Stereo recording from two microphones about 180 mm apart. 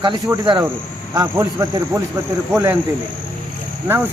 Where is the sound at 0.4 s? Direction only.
25° right (ahead or behind).